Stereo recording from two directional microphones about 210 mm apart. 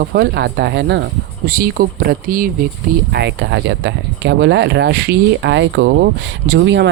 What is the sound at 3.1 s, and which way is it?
Speech, 55° right (ahead or behind).